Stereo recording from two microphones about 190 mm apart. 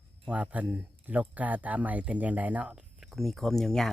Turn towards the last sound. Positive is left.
turn(degrees=0)  # may be behind; listen again after turning